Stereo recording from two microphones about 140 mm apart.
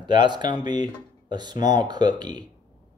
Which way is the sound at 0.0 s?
35° right (ahead or behind).